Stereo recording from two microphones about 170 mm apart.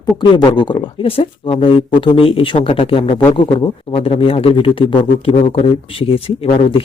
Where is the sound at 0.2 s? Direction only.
25° left (ahead or behind).